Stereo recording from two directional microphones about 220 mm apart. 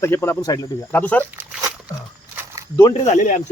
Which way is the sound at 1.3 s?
10° right (ahead or behind).